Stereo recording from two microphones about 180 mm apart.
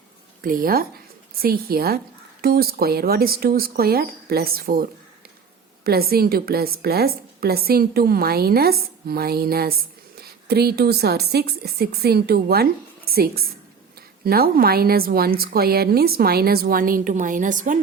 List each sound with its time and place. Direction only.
0.4 s a woman's voice: 50° right (ahead or behind)